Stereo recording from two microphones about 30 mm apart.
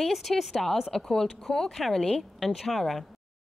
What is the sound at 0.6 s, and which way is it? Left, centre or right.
A woman's voice, centre.